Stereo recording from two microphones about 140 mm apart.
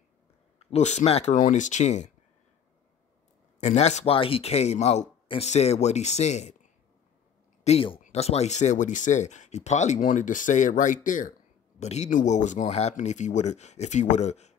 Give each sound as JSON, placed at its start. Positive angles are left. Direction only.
{"t": 0.6, "sound": "speech", "side_deg": 50}
{"t": 3.6, "sound": "speech", "side_deg": 55}
{"t": 11.8, "sound": "speech", "side_deg": 55}